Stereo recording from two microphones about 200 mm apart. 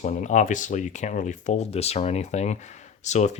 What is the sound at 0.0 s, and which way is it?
Speech, 40° left (ahead or behind).